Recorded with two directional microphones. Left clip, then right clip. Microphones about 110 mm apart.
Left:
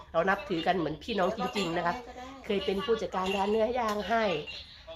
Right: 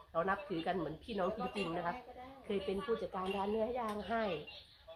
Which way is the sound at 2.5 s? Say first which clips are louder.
Left 8 dB; 25° left (ahead or behind).